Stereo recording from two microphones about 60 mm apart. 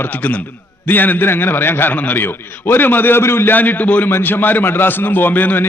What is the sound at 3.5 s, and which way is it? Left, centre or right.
A man's voice, left.